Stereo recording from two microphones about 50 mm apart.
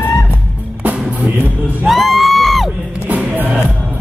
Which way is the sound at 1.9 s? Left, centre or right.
Centre.